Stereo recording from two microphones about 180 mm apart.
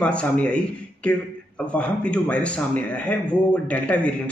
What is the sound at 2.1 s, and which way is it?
Speech, 5° left (ahead or behind).